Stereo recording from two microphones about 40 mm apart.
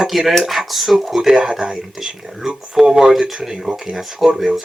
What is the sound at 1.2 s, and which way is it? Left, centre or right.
Speech, centre.